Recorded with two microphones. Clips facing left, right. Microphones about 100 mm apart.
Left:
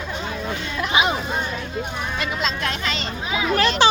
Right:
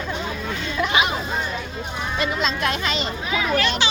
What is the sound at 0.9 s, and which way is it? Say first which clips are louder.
Speech: left 2 dB; 25° left (ahead or behind).